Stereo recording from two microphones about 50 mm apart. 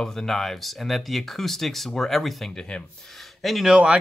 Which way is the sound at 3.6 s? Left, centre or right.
Centre.